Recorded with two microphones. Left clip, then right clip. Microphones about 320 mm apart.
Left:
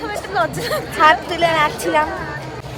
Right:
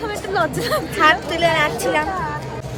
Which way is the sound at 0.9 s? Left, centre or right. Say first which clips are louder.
Left 3 dB; centre.